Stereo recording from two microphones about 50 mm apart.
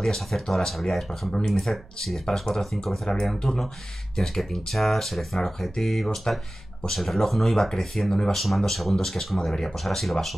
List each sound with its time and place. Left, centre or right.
0.0 s speech: centre